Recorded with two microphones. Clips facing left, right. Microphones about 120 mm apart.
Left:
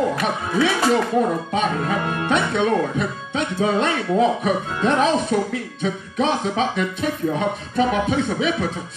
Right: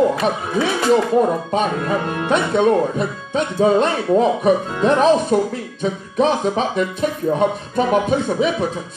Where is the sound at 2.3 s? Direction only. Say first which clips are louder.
Right 4 dB; 40° right (ahead or behind).